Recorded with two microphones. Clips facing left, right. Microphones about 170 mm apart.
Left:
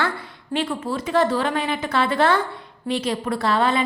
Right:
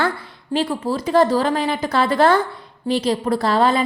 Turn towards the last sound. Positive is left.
turn(degrees=-35)  # may be behind; listen again after turning